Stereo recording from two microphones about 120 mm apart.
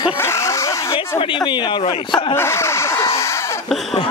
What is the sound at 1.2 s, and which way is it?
Speech, 45° left (ahead or behind).